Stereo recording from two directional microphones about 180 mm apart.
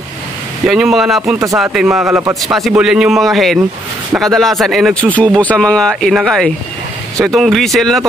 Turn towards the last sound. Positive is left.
turn(degrees=0)  # may be behind; listen again after turning